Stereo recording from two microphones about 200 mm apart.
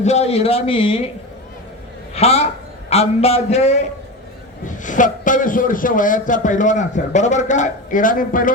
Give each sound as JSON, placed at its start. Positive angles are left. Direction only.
{"t": 0.0, "sound": "a man's voice", "side_deg": 35}
{"t": 2.1, "sound": "a man's voice", "side_deg": 30}